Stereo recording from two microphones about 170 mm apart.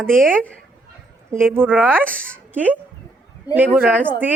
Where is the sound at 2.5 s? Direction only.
10° right (ahead or behind).